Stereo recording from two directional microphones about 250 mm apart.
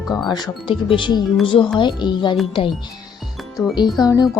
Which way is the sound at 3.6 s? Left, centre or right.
Centre.